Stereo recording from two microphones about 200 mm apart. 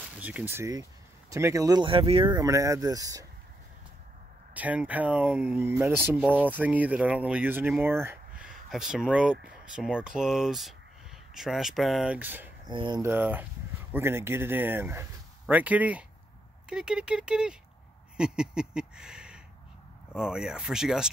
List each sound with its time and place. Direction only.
0.2 s speech: 5° right (ahead or behind)
4.6 s speech: 5° right (ahead or behind)
12.6 s speech: 20° right (ahead or behind); by 21.1 s 5° right (ahead or behind)